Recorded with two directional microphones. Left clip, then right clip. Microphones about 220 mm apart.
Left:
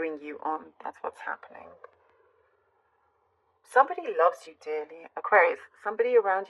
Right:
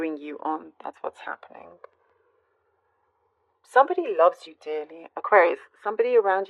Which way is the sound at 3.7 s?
45° right (ahead or behind).